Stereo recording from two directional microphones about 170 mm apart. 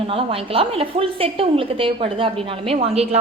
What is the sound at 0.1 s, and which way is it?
A woman's voice, 30° right (ahead or behind).